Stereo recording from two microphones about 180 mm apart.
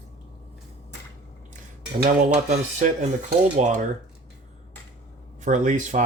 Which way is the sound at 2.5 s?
40° right (ahead or behind).